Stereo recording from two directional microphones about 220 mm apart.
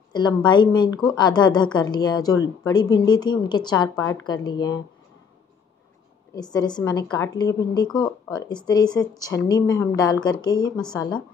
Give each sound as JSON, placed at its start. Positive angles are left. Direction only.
{"t": 0.1, "sound": "speech", "side_deg": 20}
{"t": 6.5, "sound": "a woman's voice", "side_deg": 20}